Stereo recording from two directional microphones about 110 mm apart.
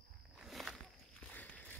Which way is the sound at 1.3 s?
15° left (ahead or behind).